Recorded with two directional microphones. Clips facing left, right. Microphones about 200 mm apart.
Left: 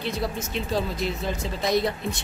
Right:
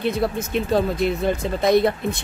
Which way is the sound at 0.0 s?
55° right (ahead or behind).